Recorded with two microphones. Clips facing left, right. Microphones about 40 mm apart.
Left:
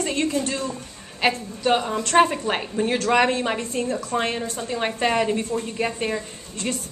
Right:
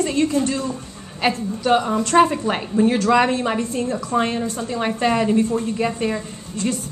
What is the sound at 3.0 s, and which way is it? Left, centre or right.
Speech, left.